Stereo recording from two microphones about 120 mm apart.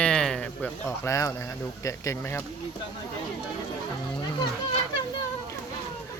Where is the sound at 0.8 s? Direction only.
25° left (ahead or behind).